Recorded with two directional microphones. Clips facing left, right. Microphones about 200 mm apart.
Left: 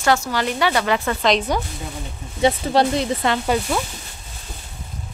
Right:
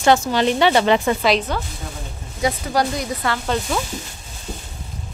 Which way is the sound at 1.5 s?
15° left (ahead or behind).